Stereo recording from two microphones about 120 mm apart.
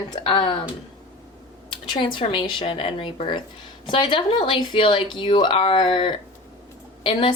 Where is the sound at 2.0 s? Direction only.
45° left (ahead or behind).